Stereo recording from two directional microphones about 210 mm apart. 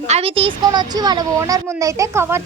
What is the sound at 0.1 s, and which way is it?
A woman's voice, 25° right (ahead or behind).